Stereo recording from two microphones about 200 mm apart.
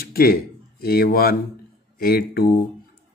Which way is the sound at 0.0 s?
50° left (ahead or behind).